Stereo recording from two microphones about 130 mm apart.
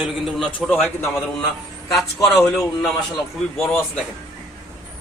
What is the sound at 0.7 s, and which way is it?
Speech, 15° left (ahead or behind).